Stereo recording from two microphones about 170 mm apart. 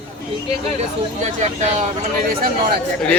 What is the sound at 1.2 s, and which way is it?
Speech, 45° right (ahead or behind).